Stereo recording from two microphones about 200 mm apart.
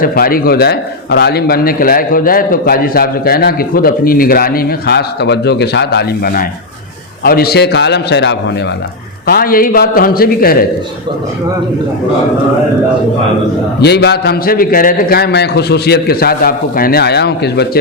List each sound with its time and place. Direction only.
0.0 s a man's voice: 45° left (ahead or behind)
9.2 s a man's voice: 50° left (ahead or behind)
13.8 s a man's voice: 55° left (ahead or behind)